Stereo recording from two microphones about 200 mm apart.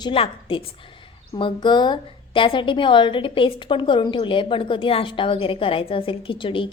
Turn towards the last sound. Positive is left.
turn(degrees=25)  # may be behind; listen again after turning